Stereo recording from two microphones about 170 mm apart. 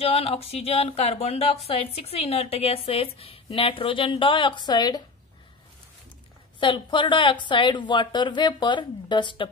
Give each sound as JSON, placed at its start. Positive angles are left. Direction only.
{"t": 0.0, "sound": "a woman's voice", "side_deg": 35}
{"t": 6.6, "sound": "a woman's voice", "side_deg": 30}